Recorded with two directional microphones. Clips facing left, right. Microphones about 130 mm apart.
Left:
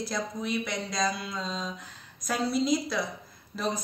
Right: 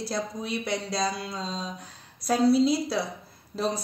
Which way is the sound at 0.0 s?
30° right (ahead or behind).